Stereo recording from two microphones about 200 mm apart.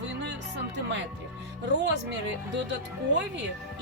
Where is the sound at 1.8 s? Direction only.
60° right (ahead or behind).